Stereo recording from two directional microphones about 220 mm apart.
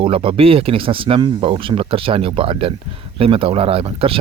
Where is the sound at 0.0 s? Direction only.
25° right (ahead or behind).